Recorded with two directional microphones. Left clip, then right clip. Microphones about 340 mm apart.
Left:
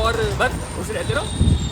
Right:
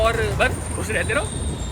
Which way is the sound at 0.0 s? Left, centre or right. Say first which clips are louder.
Even; centre.